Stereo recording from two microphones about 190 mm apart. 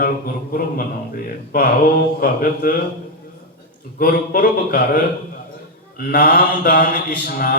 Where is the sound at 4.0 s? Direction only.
50° left (ahead or behind).